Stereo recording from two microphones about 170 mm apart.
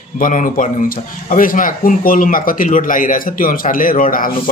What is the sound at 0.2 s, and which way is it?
Speech, 50° left (ahead or behind).